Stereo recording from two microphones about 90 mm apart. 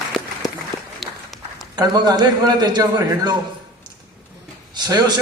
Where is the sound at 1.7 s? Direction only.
50° right (ahead or behind).